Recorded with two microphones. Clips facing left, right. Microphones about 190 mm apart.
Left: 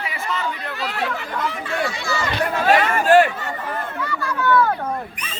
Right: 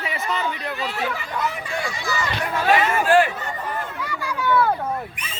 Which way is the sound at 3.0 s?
40° left (ahead or behind).